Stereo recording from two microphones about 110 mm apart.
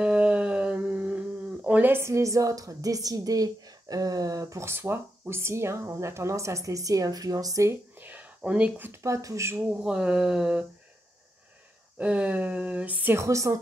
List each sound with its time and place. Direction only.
0.0 s speech: 10° right (ahead or behind)
9.0 s speech: 30° right (ahead or behind)
9.7 s speech: 10° right (ahead or behind)
12.0 s speech: 10° right (ahead or behind)
13.2 s speech: 30° right (ahead or behind)